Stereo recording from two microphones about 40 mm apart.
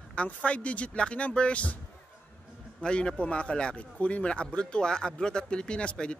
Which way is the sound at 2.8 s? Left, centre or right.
Left.